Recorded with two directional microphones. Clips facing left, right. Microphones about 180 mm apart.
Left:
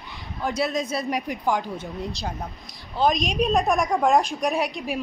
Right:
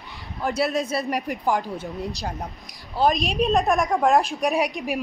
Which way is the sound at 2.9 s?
Centre (ahead or behind).